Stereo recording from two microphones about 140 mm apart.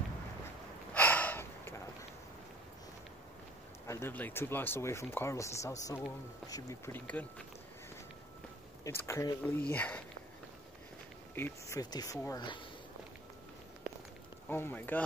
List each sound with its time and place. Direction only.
0.9 s a sound: 10° left (ahead or behind)
3.8 s speech: 20° left (ahead or behind)
7.1 s speech: 10° left (ahead or behind)
8.8 s speech: 20° left (ahead or behind)
11.3 s speech: 15° left (ahead or behind)
11.8 s speech: 30° left (ahead or behind)
14.5 s speech: 15° left (ahead or behind)